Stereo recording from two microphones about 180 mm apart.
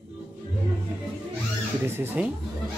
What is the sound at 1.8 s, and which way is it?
Speech, 10° right (ahead or behind).